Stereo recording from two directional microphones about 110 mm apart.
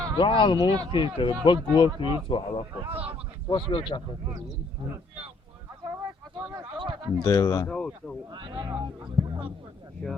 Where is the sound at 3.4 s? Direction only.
45° left (ahead or behind).